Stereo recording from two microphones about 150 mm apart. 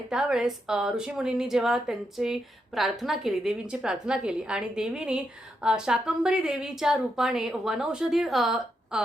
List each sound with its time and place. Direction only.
0.1 s a woman's voice: 5° right (ahead or behind)